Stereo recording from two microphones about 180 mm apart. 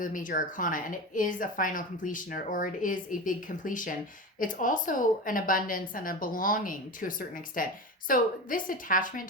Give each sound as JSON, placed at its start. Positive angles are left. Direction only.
{"t": 0.0, "sound": "a woman's voice", "side_deg": 45}